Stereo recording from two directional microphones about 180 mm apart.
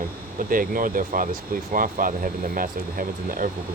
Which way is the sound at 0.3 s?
50° right (ahead or behind).